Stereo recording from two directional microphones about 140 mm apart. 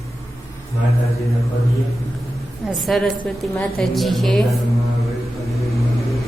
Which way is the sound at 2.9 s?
Centre (ahead or behind).